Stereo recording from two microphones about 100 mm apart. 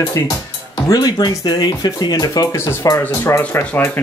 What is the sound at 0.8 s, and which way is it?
Speech, 40° left (ahead or behind).